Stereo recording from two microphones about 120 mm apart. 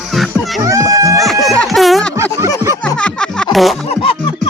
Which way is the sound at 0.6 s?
25° right (ahead or behind).